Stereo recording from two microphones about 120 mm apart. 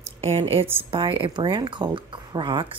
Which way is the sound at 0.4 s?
55° right (ahead or behind).